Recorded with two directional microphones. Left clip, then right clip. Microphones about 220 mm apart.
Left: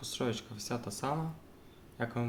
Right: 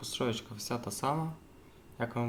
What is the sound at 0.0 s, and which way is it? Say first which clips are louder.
Speech: right 2 dB; 10° right (ahead or behind).